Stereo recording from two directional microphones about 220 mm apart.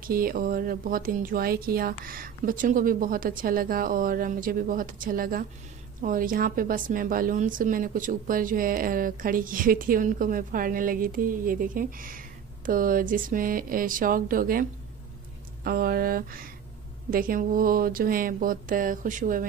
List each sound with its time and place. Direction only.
0.0 s a woman's voice: 40° right (ahead or behind)